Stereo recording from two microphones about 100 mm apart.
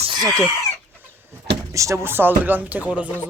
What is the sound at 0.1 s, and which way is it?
Speech, 40° right (ahead or behind).